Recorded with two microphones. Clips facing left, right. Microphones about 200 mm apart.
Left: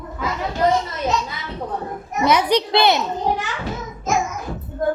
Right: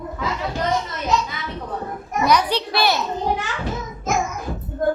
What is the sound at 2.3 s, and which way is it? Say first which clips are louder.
Child singing: left 3 dB; 20° left (ahead or behind).